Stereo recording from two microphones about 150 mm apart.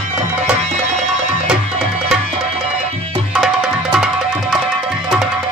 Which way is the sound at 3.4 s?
5° right (ahead or behind).